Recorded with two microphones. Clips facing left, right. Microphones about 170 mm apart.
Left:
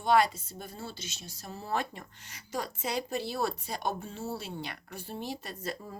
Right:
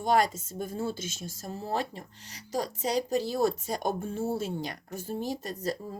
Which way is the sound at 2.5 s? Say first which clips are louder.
Right 5 dB; 40° right (ahead or behind).